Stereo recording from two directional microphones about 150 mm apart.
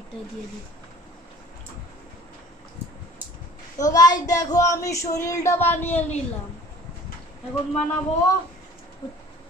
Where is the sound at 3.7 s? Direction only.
25° left (ahead or behind).